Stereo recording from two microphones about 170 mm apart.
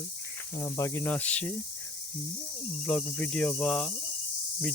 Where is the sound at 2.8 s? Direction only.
5° left (ahead or behind).